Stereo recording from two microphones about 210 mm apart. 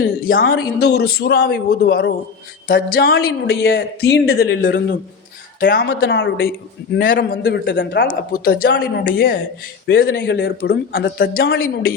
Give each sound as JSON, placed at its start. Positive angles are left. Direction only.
{"t": 0.3, "sound": "speech", "side_deg": 45}
{"t": 7.4, "sound": "speech", "side_deg": 55}